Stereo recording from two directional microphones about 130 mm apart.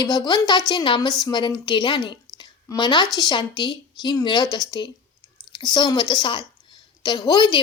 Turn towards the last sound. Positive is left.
turn(degrees=35)  # may be behind; listen again after turning